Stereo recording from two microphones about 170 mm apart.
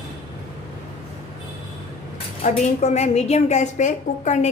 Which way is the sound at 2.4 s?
40° left (ahead or behind).